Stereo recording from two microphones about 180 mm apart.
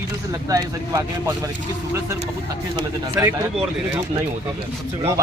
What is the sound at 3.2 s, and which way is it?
Speech, 15° right (ahead or behind).